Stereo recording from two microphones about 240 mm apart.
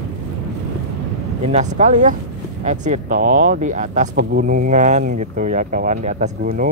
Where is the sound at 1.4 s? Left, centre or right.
Right.